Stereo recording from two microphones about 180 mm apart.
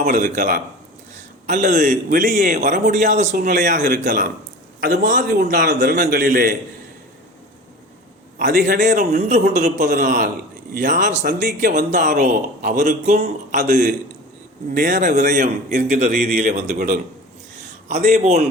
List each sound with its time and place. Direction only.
0.0 s speech: 45° right (ahead or behind)
5.5 s a man's voice: 60° right (ahead or behind)
8.4 s speech: 50° right (ahead or behind)
9.5 s speech: 40° right (ahead or behind)
17.8 s a man's voice: 40° right (ahead or behind)